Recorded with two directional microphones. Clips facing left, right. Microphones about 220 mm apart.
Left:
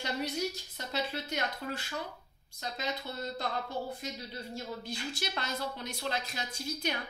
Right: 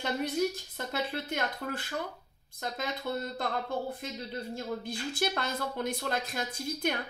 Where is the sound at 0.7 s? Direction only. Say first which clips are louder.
Right 2 dB; 55° right (ahead or behind).